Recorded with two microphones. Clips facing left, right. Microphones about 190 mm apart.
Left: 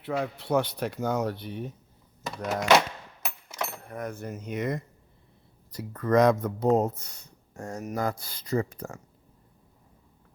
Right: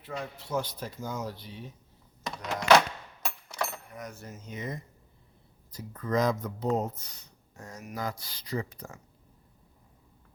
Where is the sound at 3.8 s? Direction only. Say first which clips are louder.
Left 7 dB; 55° left (ahead or behind).